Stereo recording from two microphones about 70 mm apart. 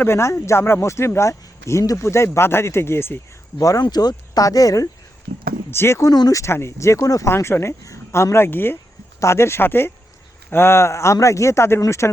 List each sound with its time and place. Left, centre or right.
0.0 s speech: left
3.6 s speech: left
5.7 s speech: left
6.0 s speech: left
6.4 s speech: left
7.3 s speech: left
8.4 s speech: left